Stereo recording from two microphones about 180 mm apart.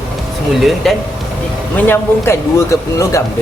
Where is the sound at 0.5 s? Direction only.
Centre (ahead or behind).